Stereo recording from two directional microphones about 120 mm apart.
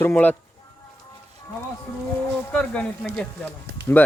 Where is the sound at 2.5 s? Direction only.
5° left (ahead or behind).